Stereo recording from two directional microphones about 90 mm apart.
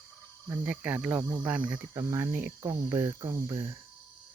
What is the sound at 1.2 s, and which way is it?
Speech, 45° right (ahead or behind).